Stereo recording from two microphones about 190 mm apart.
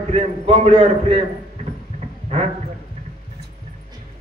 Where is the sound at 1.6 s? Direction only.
40° right (ahead or behind).